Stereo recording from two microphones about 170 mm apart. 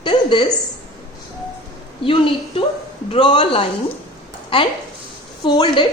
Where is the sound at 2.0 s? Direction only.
30° left (ahead or behind).